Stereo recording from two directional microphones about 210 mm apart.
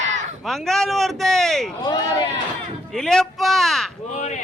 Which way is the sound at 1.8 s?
20° left (ahead or behind).